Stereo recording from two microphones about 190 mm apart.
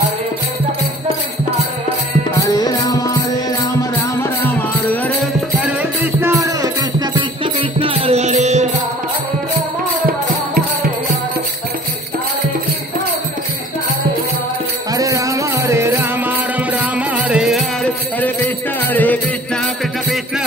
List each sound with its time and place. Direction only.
2.3 s music: 20° left (ahead or behind)
4.2 s music: 10° left (ahead or behind)
5.7 s music: 10° right (ahead or behind); by 8.6 s 35° right (ahead or behind)
14.9 s music: 15° right (ahead or behind)
18.9 s music: 10° left (ahead or behind)